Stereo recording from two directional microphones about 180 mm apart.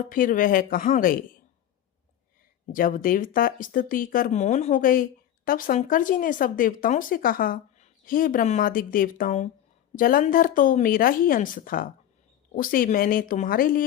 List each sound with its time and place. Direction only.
0.1 s speech: 50° left (ahead or behind)
2.7 s speech: 50° left (ahead or behind)